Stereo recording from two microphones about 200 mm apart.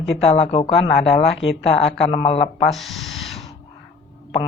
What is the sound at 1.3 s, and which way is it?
Speech, 65° left (ahead or behind).